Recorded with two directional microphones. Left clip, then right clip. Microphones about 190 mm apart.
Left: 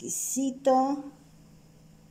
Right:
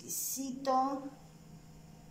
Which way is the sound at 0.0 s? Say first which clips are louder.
Left 7 dB; 90° left.